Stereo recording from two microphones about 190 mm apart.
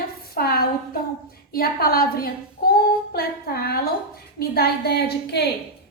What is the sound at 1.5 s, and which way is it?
A woman's voice, 50° left (ahead or behind).